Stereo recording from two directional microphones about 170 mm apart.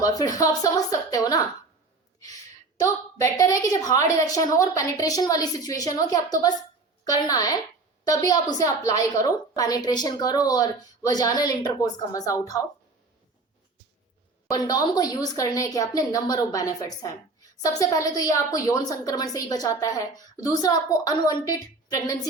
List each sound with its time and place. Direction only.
0.0 s a woman's voice: 20° left (ahead or behind)
2.8 s a woman's voice: 20° left (ahead or behind)
14.5 s a woman's voice: 20° left (ahead or behind)